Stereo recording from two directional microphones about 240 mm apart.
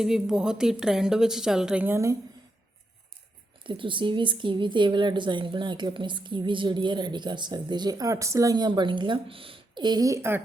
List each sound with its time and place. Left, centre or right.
0.0 s a woman's voice: centre
3.6 s speech: right